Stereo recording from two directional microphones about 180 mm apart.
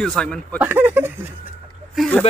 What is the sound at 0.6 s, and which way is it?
Speech, 10° right (ahead or behind).